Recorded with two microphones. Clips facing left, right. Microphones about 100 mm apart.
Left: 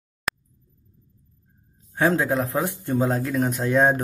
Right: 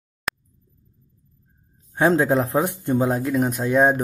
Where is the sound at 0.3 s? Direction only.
Centre (ahead or behind).